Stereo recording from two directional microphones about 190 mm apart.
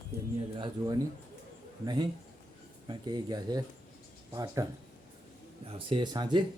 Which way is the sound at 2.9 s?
20° right (ahead or behind).